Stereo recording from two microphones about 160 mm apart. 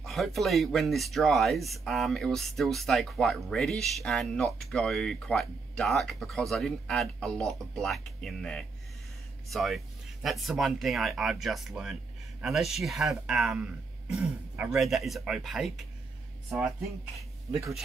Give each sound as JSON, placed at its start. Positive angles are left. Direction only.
{"t": 0.0, "sound": "speech", "side_deg": 0}
{"t": 17.5, "sound": "speech", "side_deg": -20}